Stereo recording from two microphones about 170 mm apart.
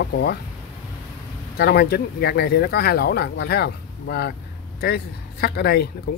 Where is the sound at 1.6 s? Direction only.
65° left (ahead or behind).